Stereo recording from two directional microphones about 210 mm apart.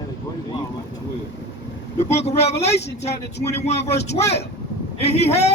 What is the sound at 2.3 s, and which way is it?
A man's voice, 30° left (ahead or behind).